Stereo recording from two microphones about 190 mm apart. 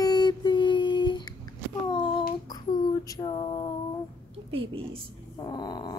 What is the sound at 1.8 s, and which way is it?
Child singing, 25° left (ahead or behind).